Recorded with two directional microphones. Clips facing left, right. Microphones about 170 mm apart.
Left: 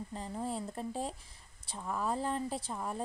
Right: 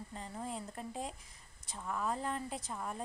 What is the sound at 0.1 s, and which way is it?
A woman's voice, 35° left (ahead or behind).